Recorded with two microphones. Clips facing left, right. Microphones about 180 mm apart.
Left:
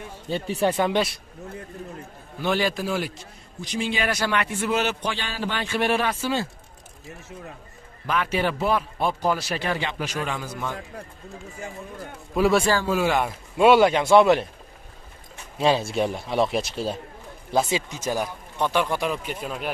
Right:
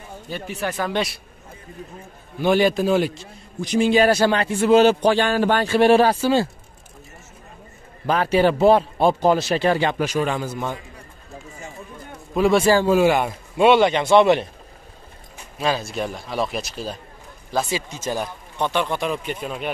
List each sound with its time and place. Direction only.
0.3 s speech: 30° left (ahead or behind)
2.4 s a man's voice: 20° right (ahead or behind)
3.6 s a man's voice: 45° right (ahead or behind); by 5.1 s 30° right (ahead or behind)
5.1 s a man's voice: 50° right (ahead or behind); by 6.4 s 35° right (ahead or behind)
8.1 s a man's voice: 35° right (ahead or behind)
9.8 s speech: 45° right (ahead or behind)
10.4 s a man's voice: 25° right (ahead or behind)
12.4 s speech: 5° left (ahead or behind)
12.7 s a man's voice: 20° right (ahead or behind)
13.1 s speech: centre (ahead or behind)
15.5 s speech: 30° left (ahead or behind); by 19.7 s 5° left (ahead or behind)